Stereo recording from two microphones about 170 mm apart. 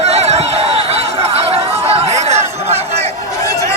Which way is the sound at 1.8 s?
35° right (ahead or behind).